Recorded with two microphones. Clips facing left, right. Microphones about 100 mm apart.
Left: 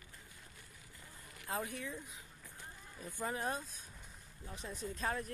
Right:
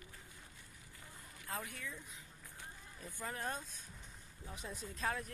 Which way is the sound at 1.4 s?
25° left (ahead or behind).